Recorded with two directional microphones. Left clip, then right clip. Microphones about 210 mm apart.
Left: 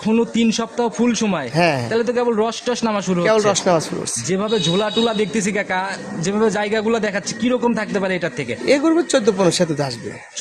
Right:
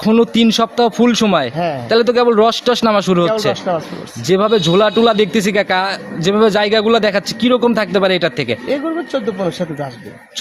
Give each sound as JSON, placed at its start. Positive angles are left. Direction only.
{"t": 0.0, "sound": "a man's voice", "side_deg": -25}
{"t": 1.5, "sound": "speech", "side_deg": 40}
{"t": 1.9, "sound": "a man's voice", "side_deg": -25}
{"t": 3.7, "sound": "speech", "side_deg": 50}
{"t": 4.3, "sound": "a man's voice", "side_deg": -25}
{"t": 8.6, "sound": "speech", "side_deg": 45}